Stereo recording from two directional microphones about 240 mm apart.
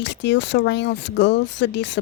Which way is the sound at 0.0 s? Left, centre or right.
Left.